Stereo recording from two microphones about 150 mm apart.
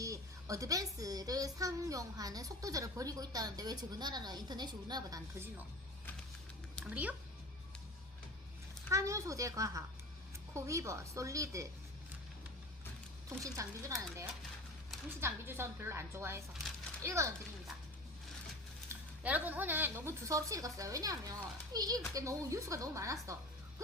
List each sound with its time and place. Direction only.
0.0 s a woman's voice: 20° right (ahead or behind)
6.9 s a woman's voice: 10° right (ahead or behind)
8.9 s a woman's voice: 20° right (ahead or behind)
13.4 s a woman's voice: 20° right (ahead or behind)
19.2 s a woman's voice: 10° right (ahead or behind)